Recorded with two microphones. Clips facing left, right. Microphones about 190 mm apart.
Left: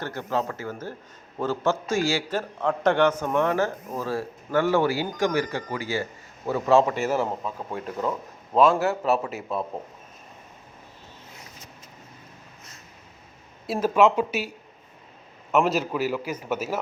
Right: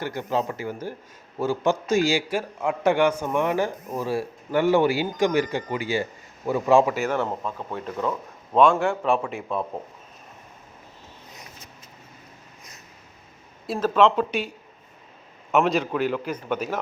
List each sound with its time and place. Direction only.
0.0 s a man's voice: 15° right (ahead or behind); by 8.1 s 5° left (ahead or behind)
8.7 s a man's voice: 40° left (ahead or behind)
9.3 s speech: 5° left (ahead or behind)
13.7 s speech: 10° left (ahead or behind)
15.5 s speech: 5° left (ahead or behind)